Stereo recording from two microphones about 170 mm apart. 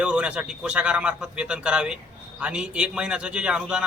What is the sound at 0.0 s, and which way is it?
A man's voice, 5° right (ahead or behind).